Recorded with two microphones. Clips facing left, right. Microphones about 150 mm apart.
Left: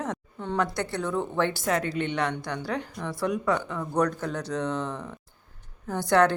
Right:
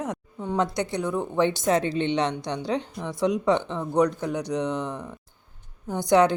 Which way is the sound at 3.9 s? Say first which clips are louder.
Right 4 dB; 15° right (ahead or behind).